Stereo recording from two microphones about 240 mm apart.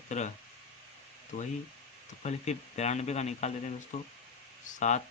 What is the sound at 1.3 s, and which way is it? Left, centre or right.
Speech, left.